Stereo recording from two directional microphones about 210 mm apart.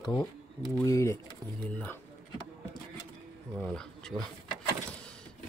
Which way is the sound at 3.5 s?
5° left (ahead or behind).